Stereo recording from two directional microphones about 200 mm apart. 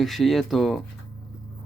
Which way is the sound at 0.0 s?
Centre (ahead or behind).